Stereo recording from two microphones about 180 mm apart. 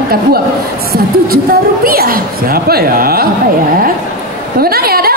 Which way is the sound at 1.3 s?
55° right (ahead or behind).